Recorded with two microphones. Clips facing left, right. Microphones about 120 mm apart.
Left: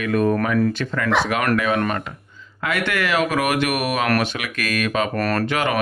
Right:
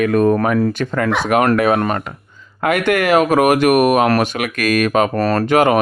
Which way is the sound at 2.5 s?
50° right (ahead or behind).